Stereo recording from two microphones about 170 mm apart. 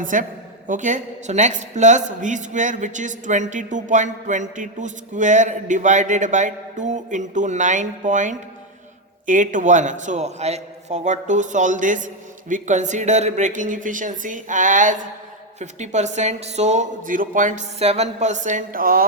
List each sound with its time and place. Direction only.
0.0 s a woman's voice: 50° right (ahead or behind)